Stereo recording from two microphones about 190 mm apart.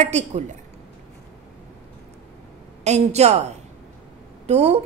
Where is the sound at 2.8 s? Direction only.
35° right (ahead or behind).